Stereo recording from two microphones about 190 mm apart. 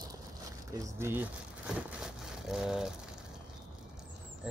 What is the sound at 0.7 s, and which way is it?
Speech, 15° right (ahead or behind).